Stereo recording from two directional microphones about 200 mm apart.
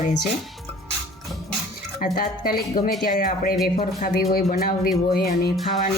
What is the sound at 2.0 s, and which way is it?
Speech, 45° left (ahead or behind).